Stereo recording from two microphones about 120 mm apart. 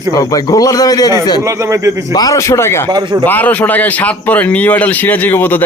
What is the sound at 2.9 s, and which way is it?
Speech, 35° right (ahead or behind).